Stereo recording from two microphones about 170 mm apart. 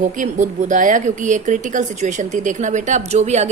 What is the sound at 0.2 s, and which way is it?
Speech, 50° right (ahead or behind).